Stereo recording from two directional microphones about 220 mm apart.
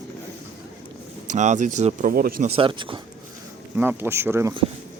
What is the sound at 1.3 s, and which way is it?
Speech, 35° right (ahead or behind).